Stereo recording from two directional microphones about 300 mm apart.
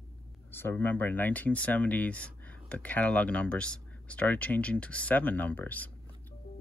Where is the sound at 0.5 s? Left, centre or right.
Centre.